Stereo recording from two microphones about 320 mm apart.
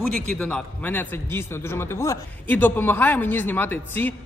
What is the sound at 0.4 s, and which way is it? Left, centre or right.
A man's voice, centre.